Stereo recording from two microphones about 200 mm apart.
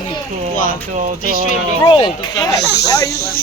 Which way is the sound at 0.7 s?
40° right (ahead or behind).